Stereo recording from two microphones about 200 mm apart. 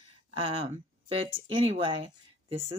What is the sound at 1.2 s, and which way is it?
Speech, 70° right (ahead or behind).